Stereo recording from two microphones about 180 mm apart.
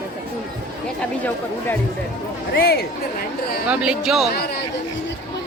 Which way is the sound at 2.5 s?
60° left (ahead or behind).